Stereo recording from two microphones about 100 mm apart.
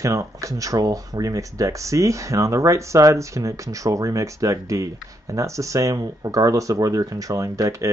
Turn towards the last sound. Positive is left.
turn(degrees=-30)  # may be behind; listen again after turning